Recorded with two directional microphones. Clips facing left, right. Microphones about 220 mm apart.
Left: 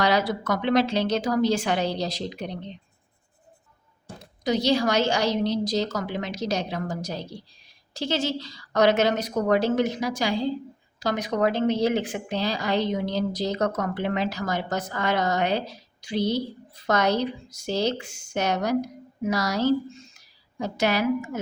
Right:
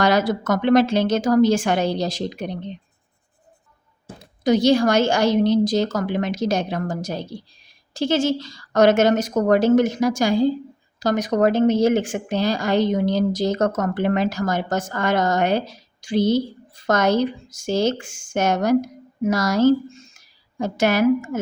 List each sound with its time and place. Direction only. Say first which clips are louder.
0.0 s a woman's voice: right 4 dB; 45° right (ahead or behind)
4.4 s a woman's voice: right 6 dB; 50° right (ahead or behind)